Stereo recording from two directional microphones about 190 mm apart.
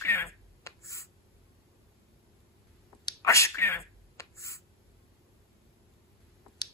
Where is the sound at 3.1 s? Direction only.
15° left (ahead or behind).